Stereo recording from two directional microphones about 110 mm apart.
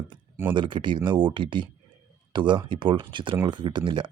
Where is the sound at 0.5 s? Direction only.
45° right (ahead or behind).